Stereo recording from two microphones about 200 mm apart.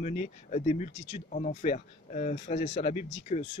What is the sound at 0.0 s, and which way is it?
Speech, 35° left (ahead or behind).